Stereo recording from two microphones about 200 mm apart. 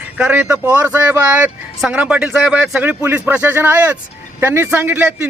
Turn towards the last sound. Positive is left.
turn(degrees=-10)  # may be behind; listen again after turning